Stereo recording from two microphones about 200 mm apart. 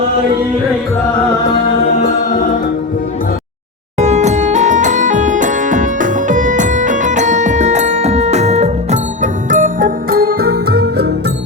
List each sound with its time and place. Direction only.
2.0 s music: 40° left (ahead or behind)
3.9 s music: 35° right (ahead or behind); by 11.1 s 55° right (ahead or behind)